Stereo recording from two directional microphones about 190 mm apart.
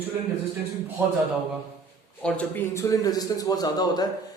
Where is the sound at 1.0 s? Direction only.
10° right (ahead or behind).